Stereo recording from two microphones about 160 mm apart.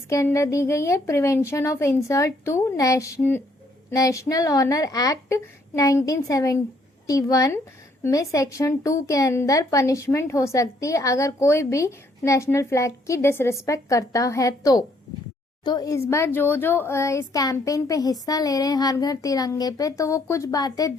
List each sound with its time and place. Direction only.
0.1 s speech: 20° left (ahead or behind)